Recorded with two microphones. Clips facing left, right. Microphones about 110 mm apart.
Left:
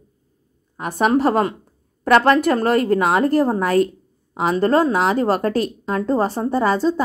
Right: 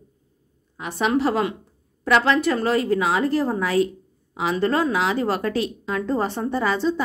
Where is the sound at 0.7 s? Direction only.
45° left (ahead or behind).